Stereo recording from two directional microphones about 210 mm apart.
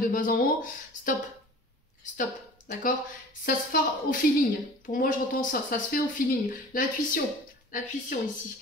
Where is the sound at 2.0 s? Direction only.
35° left (ahead or behind).